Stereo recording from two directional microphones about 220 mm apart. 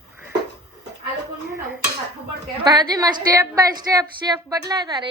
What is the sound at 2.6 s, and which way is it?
A woman's voice, 15° right (ahead or behind).